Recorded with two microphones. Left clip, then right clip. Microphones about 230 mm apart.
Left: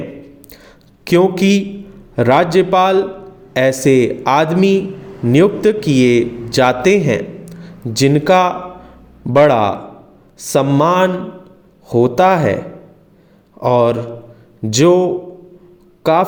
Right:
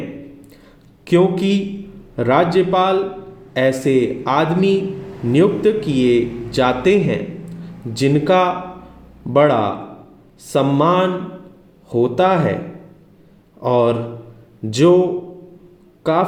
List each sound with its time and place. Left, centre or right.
1.0 s a man's voice: left
13.6 s a man's voice: left
16.0 s a man's voice: left